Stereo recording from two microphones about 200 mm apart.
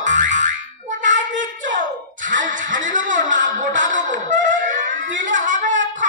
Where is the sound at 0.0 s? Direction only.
40° right (ahead or behind).